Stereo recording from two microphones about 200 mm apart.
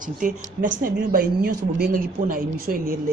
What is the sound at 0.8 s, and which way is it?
Speech, 45° right (ahead or behind).